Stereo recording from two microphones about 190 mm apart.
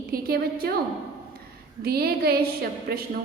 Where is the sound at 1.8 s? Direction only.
55° right (ahead or behind).